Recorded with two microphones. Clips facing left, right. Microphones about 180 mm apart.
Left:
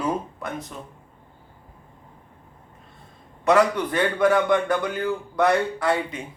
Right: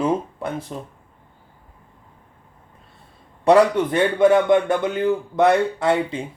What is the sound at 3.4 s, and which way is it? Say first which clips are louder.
Speech: right 4 dB; 30° right (ahead or behind).